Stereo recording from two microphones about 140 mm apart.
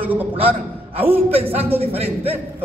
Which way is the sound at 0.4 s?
45° right (ahead or behind).